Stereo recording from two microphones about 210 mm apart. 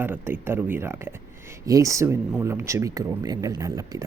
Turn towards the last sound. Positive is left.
turn(degrees=-15)  # may be behind; listen again after turning